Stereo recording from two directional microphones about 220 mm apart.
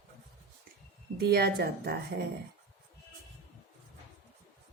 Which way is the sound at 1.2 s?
45° right (ahead or behind).